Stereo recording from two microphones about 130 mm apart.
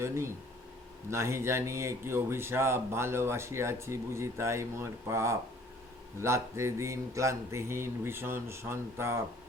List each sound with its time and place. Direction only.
1.1 s speech: 20° right (ahead or behind)